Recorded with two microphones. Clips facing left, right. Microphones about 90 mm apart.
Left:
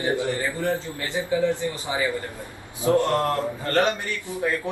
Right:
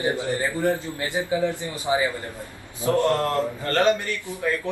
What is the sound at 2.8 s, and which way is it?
A man's voice, 20° left (ahead or behind).